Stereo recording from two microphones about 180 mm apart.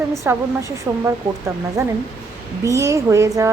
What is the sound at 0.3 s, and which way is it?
A woman's voice, 15° right (ahead or behind).